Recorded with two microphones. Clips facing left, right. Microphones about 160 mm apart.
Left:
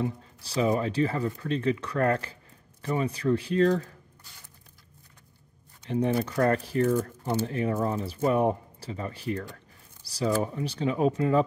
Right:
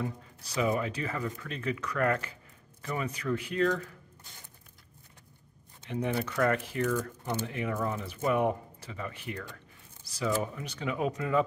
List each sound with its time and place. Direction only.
0.0 s speech: 30° left (ahead or behind)
5.9 s speech: 35° left (ahead or behind)